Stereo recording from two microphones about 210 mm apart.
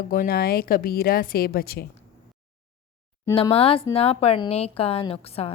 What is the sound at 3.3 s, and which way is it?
A woman's voice, 25° left (ahead or behind).